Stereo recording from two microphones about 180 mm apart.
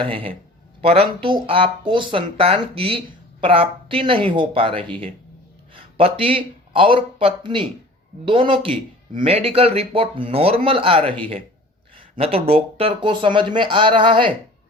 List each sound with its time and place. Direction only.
0.0 s speech: 30° right (ahead or behind)